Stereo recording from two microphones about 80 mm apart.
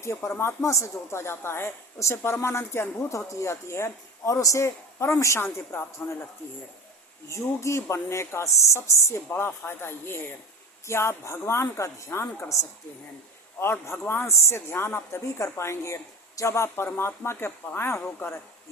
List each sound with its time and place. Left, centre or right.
0.0 s speech: left
6.0 s speech: left
7.3 s speech: left
13.6 s speech: left